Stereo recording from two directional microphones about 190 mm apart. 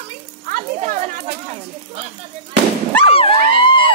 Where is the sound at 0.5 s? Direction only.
45° right (ahead or behind).